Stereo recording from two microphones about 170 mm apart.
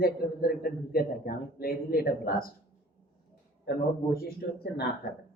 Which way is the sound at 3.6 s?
65° left (ahead or behind).